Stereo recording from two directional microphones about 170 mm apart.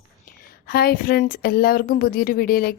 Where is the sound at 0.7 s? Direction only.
65° left (ahead or behind).